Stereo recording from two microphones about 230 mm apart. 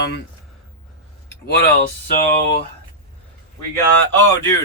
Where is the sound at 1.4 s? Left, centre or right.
Left.